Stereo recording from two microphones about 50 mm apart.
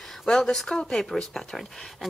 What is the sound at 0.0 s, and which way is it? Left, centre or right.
A woman's voice, centre.